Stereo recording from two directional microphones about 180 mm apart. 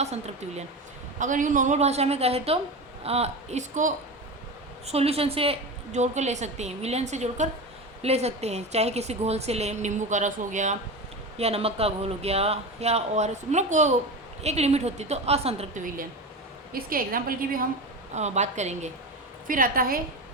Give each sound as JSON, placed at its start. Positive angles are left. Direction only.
{"t": 0.0, "sound": "a woman's voice", "side_deg": -35}
{"t": 18.1, "sound": "a woman's voice", "side_deg": -40}
{"t": 19.5, "sound": "a woman's voice", "side_deg": -50}